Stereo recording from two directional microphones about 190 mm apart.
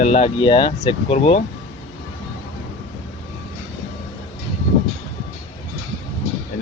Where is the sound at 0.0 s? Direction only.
35° left (ahead or behind).